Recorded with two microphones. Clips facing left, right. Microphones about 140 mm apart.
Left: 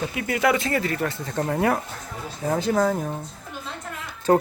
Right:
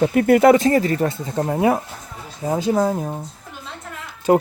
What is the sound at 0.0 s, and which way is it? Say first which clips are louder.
Speech: right 10 dB; 45° right (ahead or behind).